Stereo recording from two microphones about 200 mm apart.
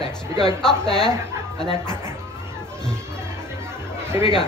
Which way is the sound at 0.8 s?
5° left (ahead or behind).